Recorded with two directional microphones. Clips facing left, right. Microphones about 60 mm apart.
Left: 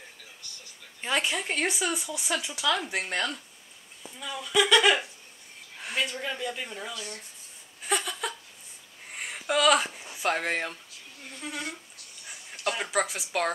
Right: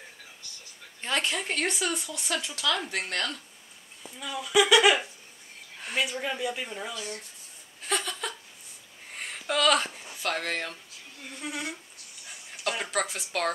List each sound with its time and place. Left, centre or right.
1.0 s speech: centre
4.2 s speech: centre
5.8 s a sound: centre
6.0 s speech: centre
7.8 s a sound: centre
10.2 s speech: centre
11.4 s speech: centre
12.3 s a sound: centre
13.0 s speech: centre